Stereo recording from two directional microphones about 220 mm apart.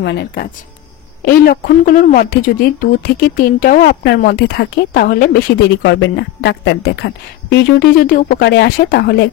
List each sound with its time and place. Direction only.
0.0 s a woman's voice: 50° left (ahead or behind)